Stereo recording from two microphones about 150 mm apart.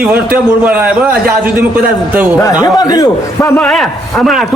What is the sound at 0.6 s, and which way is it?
Speech, 10° right (ahead or behind).